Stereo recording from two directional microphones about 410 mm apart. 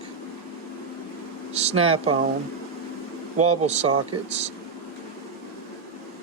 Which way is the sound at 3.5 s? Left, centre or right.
Centre.